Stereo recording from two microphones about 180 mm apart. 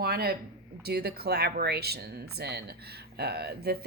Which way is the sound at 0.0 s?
60° right (ahead or behind).